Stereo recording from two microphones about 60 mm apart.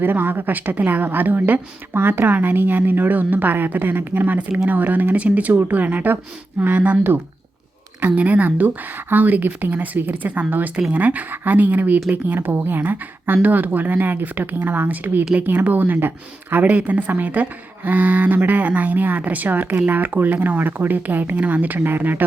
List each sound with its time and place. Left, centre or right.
0.0 s a woman's voice: right
8.0 s a woman's voice: right
16.6 s a woman's voice: right